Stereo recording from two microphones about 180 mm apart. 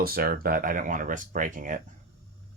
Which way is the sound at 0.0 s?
55° right (ahead or behind).